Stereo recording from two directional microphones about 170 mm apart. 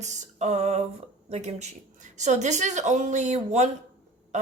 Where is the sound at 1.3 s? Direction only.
40° right (ahead or behind).